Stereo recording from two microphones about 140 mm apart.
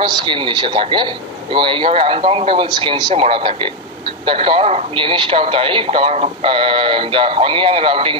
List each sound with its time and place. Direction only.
0.0 s speech: 35° right (ahead or behind)